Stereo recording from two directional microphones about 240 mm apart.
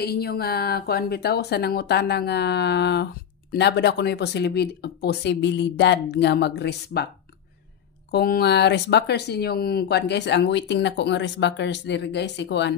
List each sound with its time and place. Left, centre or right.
0.0 s speech: left
8.1 s speech: left